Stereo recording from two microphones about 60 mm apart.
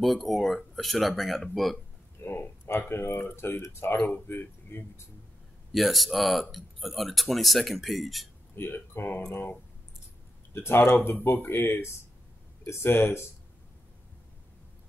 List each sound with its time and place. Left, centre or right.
0.0 s speech: centre
2.2 s speech: left
5.7 s speech: centre
8.5 s speech: left